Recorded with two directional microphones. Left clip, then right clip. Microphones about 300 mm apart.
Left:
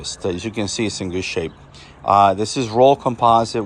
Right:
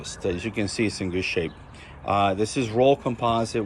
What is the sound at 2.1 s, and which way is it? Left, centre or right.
Speech, centre.